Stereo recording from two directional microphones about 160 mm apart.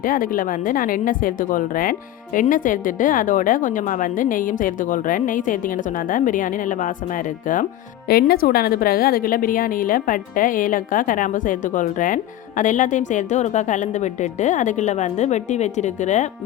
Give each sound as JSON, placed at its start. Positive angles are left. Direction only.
{"t": 0.0, "sound": "a woman's voice", "side_deg": 60}